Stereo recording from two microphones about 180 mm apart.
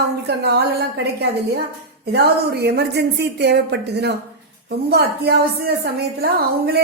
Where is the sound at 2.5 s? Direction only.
65° right (ahead or behind).